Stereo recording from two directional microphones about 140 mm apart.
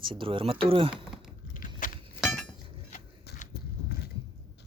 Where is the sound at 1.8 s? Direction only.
75° left (ahead or behind).